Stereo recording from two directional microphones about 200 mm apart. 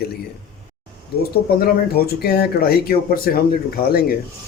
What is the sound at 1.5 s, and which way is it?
Speech, 50° left (ahead or behind).